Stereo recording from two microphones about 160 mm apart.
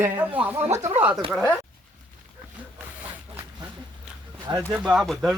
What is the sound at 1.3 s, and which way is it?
Speech, centre (ahead or behind).